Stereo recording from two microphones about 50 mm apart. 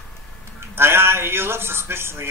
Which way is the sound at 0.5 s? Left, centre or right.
Right.